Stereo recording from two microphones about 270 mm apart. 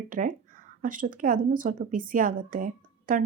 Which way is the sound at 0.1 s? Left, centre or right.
Right.